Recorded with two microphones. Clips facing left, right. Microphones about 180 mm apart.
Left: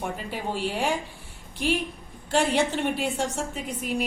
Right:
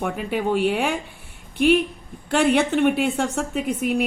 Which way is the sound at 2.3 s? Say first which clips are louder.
Right 4 dB; 60° right (ahead or behind).